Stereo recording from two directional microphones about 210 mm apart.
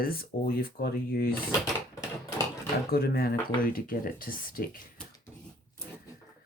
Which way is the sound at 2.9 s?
45° left (ahead or behind).